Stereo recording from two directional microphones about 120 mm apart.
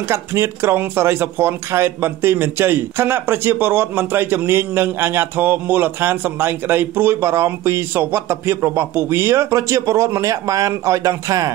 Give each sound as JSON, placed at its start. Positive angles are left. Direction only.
{"t": 0.1, "sound": "speech", "side_deg": -20}